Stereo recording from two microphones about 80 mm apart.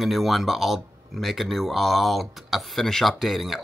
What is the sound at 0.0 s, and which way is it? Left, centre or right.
Speech, centre.